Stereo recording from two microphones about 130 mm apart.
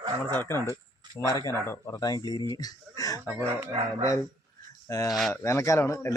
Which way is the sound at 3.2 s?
15° right (ahead or behind).